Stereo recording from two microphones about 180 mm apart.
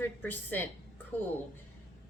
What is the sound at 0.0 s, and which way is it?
Speech, 10° left (ahead or behind).